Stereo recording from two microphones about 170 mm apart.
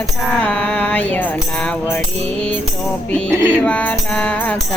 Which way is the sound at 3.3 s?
10° right (ahead or behind).